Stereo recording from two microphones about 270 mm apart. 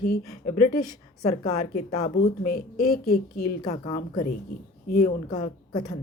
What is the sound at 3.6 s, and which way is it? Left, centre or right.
Speech, left.